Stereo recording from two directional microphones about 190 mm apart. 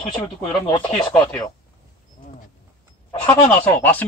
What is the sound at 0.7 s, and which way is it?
Speech, 25° left (ahead or behind).